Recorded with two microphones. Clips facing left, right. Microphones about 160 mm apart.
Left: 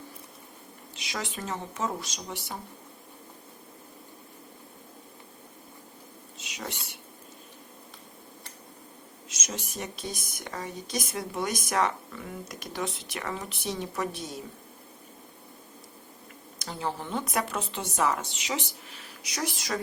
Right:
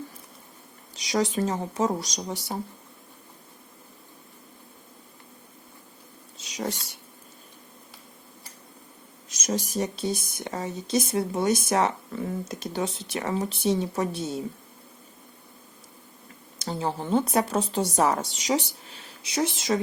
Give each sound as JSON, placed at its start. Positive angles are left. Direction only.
{"t": 0.9, "sound": "a woman's voice", "side_deg": -35}
{"t": 9.5, "sound": "speech", "side_deg": -35}
{"t": 16.6, "sound": "a woman's voice", "side_deg": -30}